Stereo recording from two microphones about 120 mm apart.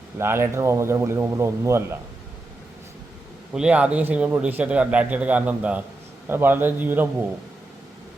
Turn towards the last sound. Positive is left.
turn(degrees=-15)  # may be behind; listen again after turning